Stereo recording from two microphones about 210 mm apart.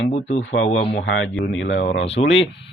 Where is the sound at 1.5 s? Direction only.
60° left (ahead or behind).